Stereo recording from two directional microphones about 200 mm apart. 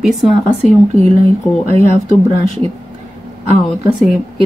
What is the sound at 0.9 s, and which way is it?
Speech, 30° right (ahead or behind).